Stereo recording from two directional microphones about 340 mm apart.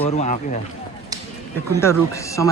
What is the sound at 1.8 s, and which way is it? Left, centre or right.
Speech, centre.